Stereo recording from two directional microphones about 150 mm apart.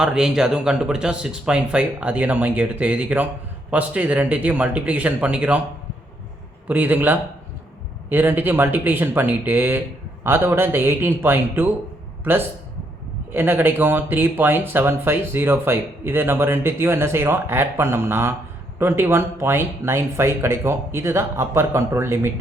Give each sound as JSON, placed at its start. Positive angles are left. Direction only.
{"t": 0.0, "sound": "speech", "side_deg": -5}
{"t": 6.7, "sound": "speech", "side_deg": -10}
{"t": 13.3, "sound": "speech", "side_deg": -10}